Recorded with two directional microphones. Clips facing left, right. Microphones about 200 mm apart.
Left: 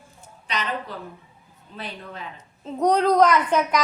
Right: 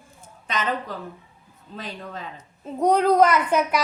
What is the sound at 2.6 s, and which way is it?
A child's voice, 5° right (ahead or behind).